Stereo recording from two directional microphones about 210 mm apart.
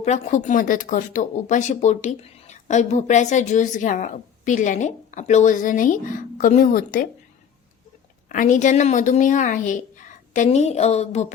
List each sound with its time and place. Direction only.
0.0 s speech: 35° left (ahead or behind)
8.3 s speech: 35° left (ahead or behind)